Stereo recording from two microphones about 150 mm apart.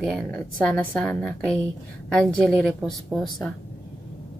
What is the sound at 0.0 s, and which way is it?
A woman's voice, 5° left (ahead or behind).